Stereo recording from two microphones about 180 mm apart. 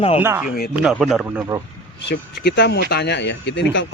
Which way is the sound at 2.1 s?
70° left (ahead or behind).